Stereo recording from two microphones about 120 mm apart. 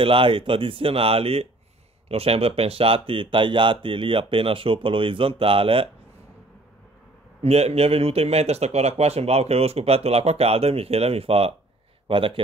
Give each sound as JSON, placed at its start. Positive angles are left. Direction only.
{"t": 0.0, "sound": "speech", "side_deg": -50}
{"t": 7.4, "sound": "speech", "side_deg": -60}